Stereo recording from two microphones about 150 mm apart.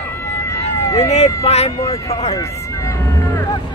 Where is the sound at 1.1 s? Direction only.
45° left (ahead or behind).